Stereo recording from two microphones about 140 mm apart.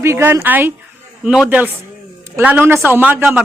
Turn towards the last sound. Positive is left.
turn(degrees=-15)  # may be behind; listen again after turning